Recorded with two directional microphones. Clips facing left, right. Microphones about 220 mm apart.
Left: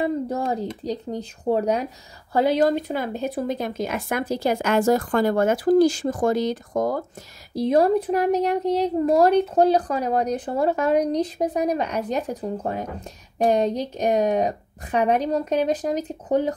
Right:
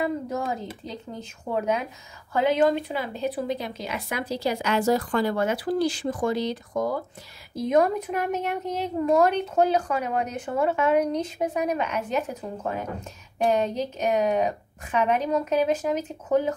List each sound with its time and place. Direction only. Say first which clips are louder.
0.0 s a woman's voice: left 3 dB; 35° left (ahead or behind)
7.5 s a woman's voice: left 3 dB; 35° left (ahead or behind)